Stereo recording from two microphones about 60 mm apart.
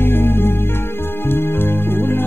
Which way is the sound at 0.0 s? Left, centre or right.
Left.